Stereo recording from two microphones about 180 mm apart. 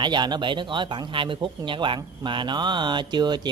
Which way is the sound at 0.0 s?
25° right (ahead or behind).